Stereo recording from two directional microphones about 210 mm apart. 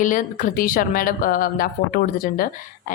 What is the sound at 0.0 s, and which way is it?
A woman's voice, 40° left (ahead or behind).